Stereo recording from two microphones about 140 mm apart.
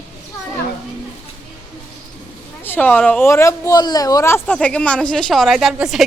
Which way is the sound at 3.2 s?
20° left (ahead or behind).